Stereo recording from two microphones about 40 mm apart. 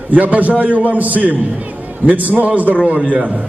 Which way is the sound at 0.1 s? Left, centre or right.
Right.